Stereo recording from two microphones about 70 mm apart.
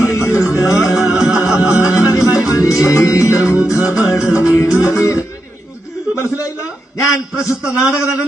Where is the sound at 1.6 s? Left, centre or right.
Left.